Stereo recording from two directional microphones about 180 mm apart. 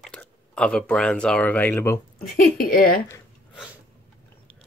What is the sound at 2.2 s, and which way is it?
Speech, 55° left (ahead or behind).